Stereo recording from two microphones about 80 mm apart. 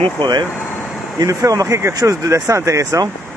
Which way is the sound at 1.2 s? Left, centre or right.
Right.